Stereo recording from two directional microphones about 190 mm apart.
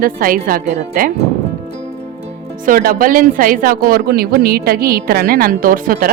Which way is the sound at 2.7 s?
50° right (ahead or behind).